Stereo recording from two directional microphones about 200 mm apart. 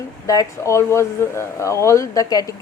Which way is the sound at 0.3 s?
15° left (ahead or behind).